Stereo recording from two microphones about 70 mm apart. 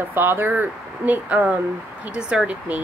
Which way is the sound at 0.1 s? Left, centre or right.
Right.